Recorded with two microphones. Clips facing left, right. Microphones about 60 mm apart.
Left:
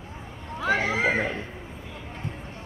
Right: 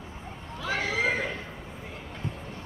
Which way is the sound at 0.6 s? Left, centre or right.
Left.